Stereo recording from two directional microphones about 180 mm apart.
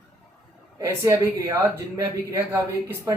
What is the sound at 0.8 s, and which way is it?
Speech, 15° right (ahead or behind).